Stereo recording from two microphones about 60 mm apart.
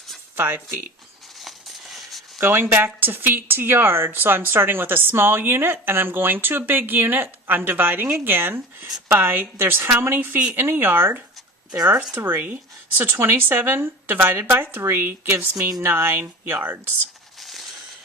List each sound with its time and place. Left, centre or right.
0.3 s speech: right
1.4 s a sound: centre
2.4 s speech: right
2.7 s speech: right
14.5 s speech: right
17.4 s a sound: centre